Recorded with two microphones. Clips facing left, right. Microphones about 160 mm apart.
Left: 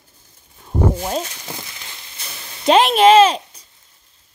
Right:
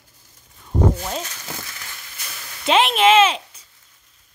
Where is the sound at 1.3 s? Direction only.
15° left (ahead or behind).